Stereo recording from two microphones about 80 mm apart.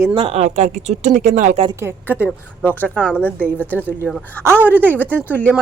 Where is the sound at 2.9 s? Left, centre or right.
Centre.